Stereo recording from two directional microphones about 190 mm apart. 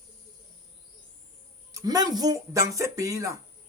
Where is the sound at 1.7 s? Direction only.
20° right (ahead or behind).